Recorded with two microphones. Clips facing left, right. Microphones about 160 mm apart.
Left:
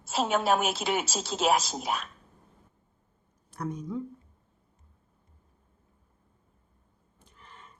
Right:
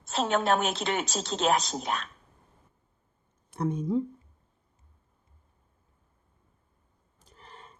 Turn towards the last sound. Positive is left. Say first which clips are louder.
# right 2 dB
turn(degrees=-35)  # may be behind; listen again after turning